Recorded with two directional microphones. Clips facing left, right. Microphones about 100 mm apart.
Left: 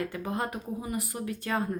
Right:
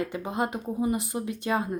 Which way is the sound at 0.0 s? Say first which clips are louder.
Right 3 dB; 20° right (ahead or behind).